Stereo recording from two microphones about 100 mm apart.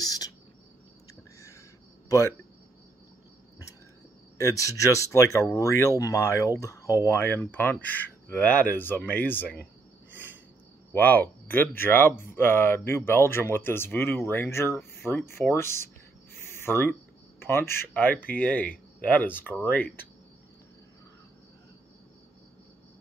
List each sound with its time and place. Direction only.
0.0 s cricket: 40° left (ahead or behind)
2.0 s speech: 30° left (ahead or behind)
4.4 s speech: 35° left (ahead or behind)
10.1 s cricket: 20° right (ahead or behind)
10.9 s speech: 15° left (ahead or behind)
16.3 s a sound: 25° left (ahead or behind)
17.4 s speech: 25° left (ahead or behind)